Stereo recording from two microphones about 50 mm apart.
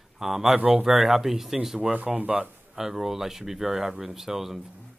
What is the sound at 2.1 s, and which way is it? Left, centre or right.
Speech, right.